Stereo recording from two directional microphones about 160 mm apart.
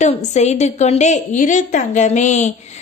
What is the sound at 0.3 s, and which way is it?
A woman's voice, 45° left (ahead or behind).